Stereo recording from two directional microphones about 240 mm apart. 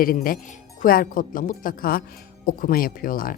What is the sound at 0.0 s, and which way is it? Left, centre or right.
Speech, left.